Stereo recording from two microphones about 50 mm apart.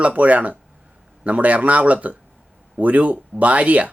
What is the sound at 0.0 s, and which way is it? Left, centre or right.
Speech, right.